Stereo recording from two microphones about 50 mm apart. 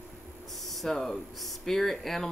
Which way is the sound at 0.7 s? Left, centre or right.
Centre.